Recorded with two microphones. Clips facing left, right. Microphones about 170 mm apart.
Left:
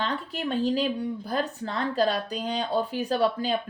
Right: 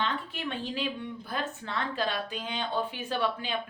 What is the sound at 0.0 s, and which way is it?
Speech, 40° left (ahead or behind).